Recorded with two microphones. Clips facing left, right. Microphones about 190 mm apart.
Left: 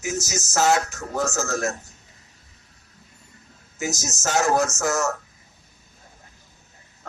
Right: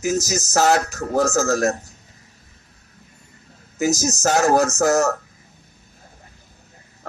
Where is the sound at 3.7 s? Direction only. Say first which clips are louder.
Right 9 dB; 35° right (ahead or behind).